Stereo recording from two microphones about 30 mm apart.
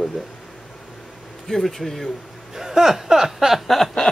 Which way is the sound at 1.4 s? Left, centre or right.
Centre.